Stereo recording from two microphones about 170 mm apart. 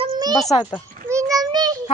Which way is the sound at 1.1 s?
20° right (ahead or behind).